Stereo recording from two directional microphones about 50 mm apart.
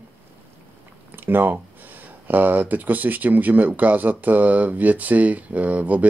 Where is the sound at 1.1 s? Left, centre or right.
Right.